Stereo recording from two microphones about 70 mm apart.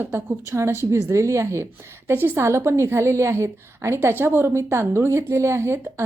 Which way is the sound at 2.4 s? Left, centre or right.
Right.